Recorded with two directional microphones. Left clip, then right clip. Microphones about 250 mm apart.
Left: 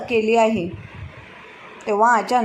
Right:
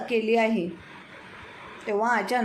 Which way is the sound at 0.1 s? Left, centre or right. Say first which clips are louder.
Left 6 dB; centre.